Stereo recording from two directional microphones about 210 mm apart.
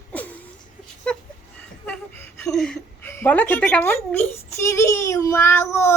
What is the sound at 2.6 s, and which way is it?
A woman's voice, 5° left (ahead or behind).